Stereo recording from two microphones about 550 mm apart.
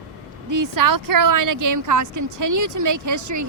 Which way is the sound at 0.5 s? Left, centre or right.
Right.